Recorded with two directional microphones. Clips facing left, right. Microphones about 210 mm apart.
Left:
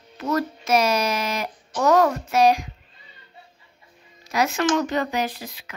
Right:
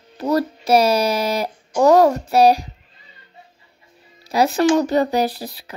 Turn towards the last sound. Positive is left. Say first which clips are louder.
# right 6 dB
turn(degrees=-35)  # may be behind; listen again after turning